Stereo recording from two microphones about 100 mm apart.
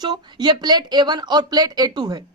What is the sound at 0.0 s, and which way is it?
A woman's voice, 45° right (ahead or behind).